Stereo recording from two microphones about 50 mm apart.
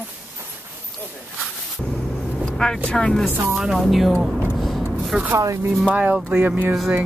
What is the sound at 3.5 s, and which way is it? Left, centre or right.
Speech, centre.